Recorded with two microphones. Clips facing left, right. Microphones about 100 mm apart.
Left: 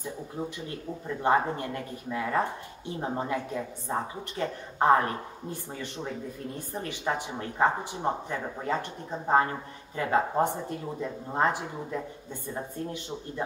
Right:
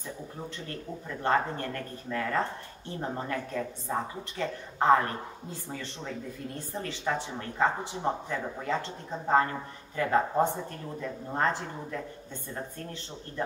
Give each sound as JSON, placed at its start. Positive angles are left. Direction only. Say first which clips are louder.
{"t": 0.4, "sound": "speech", "louder": "left 4 dB", "side_deg": 15}